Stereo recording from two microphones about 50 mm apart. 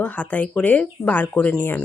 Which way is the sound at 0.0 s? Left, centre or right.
Left.